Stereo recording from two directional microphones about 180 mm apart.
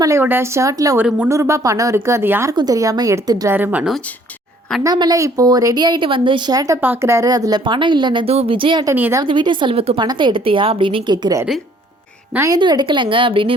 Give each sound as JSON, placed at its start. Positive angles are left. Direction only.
{"t": 0.0, "sound": "speech", "side_deg": -15}
{"t": 4.8, "sound": "a woman's voice", "side_deg": -20}
{"t": 9.0, "sound": "speech", "side_deg": -10}
{"t": 9.2, "sound": "a woman's voice", "side_deg": -25}